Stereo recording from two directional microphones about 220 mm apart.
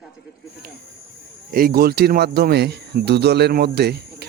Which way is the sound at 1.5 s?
45° right (ahead or behind).